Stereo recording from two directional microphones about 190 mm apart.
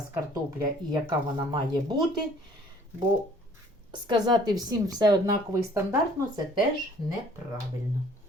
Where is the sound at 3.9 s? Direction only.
25° right (ahead or behind).